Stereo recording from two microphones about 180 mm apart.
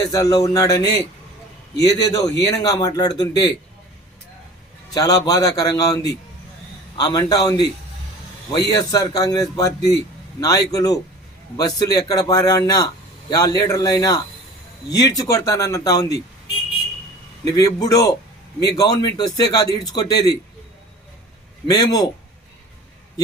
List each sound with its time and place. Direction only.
0.0 s a man's voice: 20° left (ahead or behind)
4.9 s a man's voice: 20° left (ahead or behind)
17.4 s a man's voice: 20° left (ahead or behind)
21.7 s a man's voice: 20° left (ahead or behind)